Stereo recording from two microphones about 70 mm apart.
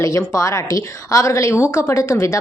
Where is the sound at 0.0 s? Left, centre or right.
Left.